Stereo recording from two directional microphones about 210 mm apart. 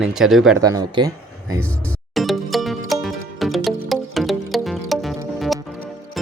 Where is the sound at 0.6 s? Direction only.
15° right (ahead or behind).